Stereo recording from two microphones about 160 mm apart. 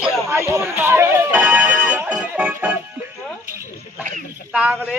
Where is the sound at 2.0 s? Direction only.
10° right (ahead or behind).